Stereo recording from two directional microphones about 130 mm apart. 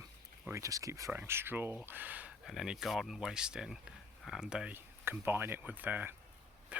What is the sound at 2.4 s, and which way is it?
Speech, centre (ahead or behind).